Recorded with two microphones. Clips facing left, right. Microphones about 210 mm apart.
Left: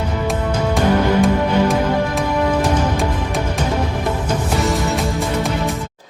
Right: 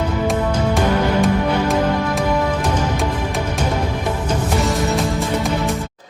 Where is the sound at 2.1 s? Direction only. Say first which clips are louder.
Left 1 dB; centre (ahead or behind).